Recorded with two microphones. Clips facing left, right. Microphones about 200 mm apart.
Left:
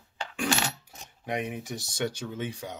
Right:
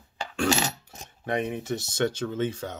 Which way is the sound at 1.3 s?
10° left (ahead or behind).